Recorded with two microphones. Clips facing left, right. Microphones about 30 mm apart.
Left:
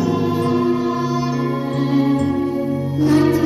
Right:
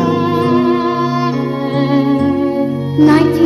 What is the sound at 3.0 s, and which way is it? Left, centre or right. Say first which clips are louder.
Music: right 6 dB; right.